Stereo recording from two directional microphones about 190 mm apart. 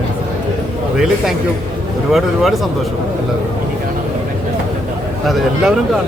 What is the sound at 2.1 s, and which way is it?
Speech, centre (ahead or behind).